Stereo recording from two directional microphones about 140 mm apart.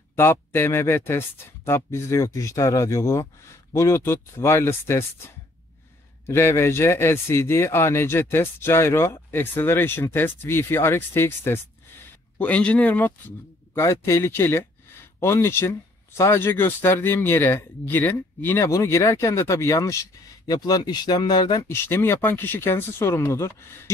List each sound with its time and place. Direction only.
0.1 s speech: 15° left (ahead or behind)
6.2 s speech: 20° left (ahead or behind)
21.6 s speech: 20° left (ahead or behind)